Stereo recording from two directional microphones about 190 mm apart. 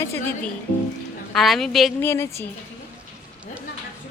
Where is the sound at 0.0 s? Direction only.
10° left (ahead or behind).